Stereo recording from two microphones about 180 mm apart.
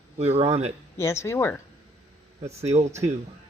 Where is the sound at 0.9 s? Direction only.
15° left (ahead or behind).